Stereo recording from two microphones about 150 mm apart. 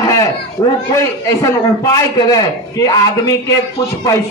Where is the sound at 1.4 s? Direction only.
20° left (ahead or behind).